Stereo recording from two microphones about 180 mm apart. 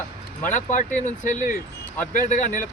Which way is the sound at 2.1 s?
45° left (ahead or behind).